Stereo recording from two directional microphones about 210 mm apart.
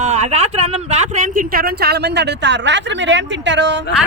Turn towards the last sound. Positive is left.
turn(degrees=-55)  # may be behind; listen again after turning